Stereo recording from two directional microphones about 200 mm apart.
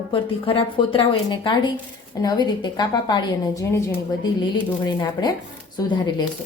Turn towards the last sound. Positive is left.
turn(degrees=20)  # may be behind; listen again after turning